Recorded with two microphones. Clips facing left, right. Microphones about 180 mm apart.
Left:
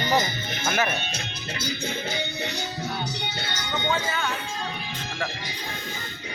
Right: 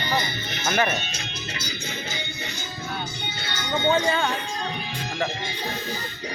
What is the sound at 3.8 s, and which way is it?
Speech, 30° right (ahead or behind).